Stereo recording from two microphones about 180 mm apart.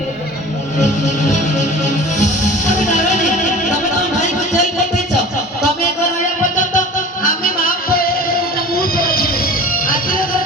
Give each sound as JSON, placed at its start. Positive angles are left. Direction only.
{"t": 0.8, "sound": "music", "side_deg": 40}
{"t": 4.2, "sound": "a sound", "side_deg": 40}
{"t": 6.6, "sound": "music", "side_deg": 50}